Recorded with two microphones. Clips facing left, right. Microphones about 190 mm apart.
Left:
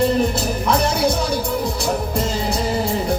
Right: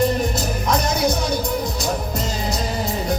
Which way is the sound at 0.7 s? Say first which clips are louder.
Left 2 dB; 30° left (ahead or behind).